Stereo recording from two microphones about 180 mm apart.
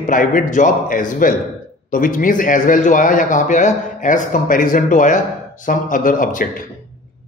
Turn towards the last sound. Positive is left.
turn(degrees=50)  # may be behind; listen again after turning